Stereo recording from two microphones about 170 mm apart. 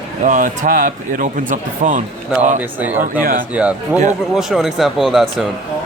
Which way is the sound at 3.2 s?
55° right (ahead or behind).